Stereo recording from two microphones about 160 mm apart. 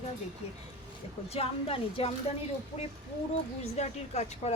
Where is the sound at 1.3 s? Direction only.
35° left (ahead or behind).